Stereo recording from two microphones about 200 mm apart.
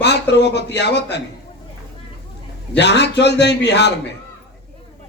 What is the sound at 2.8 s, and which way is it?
A man's voice, 60° left (ahead or behind).